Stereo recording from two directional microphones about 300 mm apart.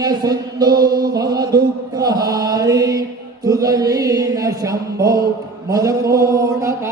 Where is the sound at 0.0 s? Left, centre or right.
Centre.